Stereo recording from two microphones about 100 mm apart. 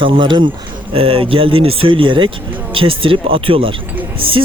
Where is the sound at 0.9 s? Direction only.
70° right (ahead or behind).